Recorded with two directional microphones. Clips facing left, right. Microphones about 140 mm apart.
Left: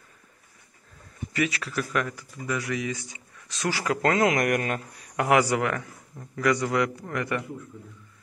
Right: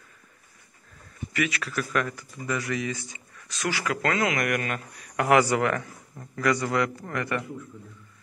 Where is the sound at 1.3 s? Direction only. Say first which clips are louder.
Left 1 dB; 30° left (ahead or behind).